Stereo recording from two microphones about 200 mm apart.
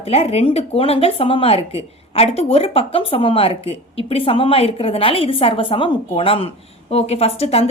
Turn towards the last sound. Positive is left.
turn(degrees=30)  # may be behind; listen again after turning